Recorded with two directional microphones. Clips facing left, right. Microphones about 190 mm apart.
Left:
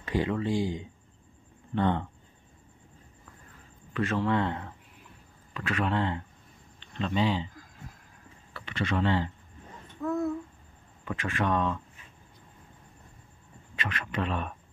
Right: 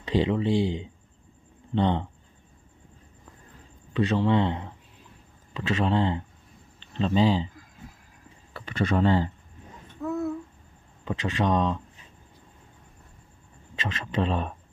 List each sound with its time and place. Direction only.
0.0 s speech: 20° right (ahead or behind)
0.5 s speech: 70° right (ahead or behind)
1.8 s speech: 20° right (ahead or behind)
3.9 s speech: 20° right (ahead or behind)
8.5 s speech: 40° right (ahead or behind)
10.0 s a sound: 5° right (ahead or behind)
11.1 s speech: 20° right (ahead or behind)
13.8 s speech: 25° right (ahead or behind)